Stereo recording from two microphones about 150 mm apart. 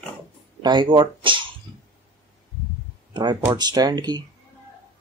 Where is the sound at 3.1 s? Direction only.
30° right (ahead or behind).